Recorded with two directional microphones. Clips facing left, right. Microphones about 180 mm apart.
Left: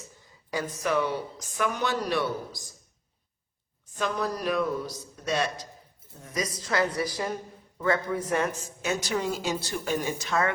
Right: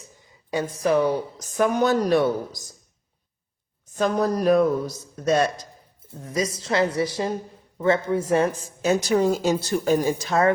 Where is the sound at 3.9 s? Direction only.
45° right (ahead or behind).